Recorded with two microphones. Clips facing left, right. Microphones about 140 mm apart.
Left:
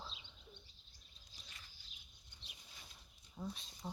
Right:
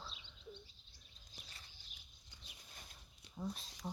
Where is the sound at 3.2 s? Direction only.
75° right (ahead or behind).